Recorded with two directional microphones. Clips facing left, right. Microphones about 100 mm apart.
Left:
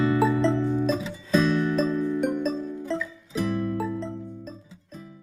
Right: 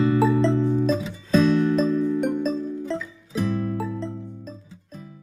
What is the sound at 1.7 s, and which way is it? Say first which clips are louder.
Music: right 3 dB; centre (ahead or behind).